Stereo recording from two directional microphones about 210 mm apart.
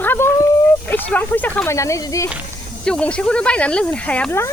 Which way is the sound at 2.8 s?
5° left (ahead or behind).